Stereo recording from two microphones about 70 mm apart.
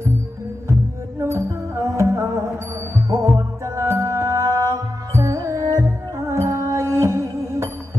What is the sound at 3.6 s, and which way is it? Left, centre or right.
Music, right.